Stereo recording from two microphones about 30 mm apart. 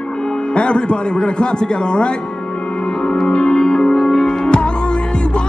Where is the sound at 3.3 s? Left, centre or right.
Left.